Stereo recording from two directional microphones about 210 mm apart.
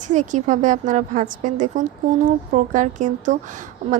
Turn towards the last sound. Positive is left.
turn(degrees=-35)  # may be behind; listen again after turning